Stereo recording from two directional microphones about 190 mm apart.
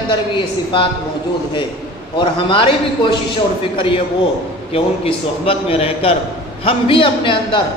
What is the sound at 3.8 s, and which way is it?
A man's voice, 30° left (ahead or behind).